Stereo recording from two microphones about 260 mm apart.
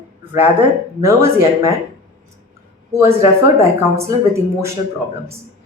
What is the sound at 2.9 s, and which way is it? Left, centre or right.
A woman's voice, centre.